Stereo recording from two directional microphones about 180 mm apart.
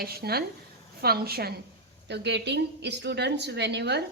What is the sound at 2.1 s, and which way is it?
A woman's voice, 70° right (ahead or behind).